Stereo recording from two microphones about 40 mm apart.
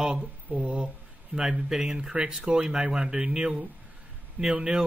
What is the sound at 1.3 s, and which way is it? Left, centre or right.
Speech, centre.